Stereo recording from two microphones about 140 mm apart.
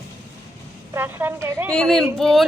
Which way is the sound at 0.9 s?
15° right (ahead or behind).